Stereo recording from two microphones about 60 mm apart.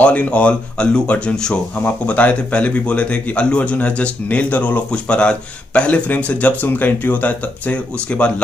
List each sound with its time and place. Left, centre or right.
0.0 s speech: left
1.8 s speech: left